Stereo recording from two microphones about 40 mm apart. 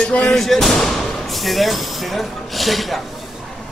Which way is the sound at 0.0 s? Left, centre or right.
Left.